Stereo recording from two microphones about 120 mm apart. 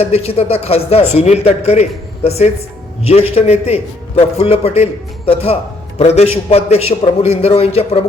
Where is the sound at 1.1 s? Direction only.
65° left (ahead or behind).